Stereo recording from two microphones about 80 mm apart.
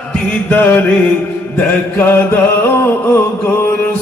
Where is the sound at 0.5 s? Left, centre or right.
Left.